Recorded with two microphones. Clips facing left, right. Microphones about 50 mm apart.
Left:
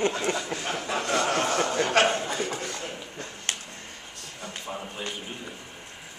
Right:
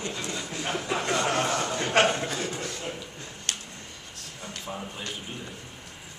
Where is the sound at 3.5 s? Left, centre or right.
Left.